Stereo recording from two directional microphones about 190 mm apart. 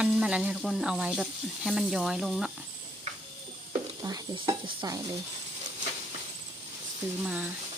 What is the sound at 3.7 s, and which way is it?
Speech, 20° right (ahead or behind).